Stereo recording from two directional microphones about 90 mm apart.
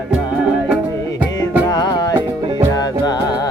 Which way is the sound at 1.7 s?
45° left (ahead or behind).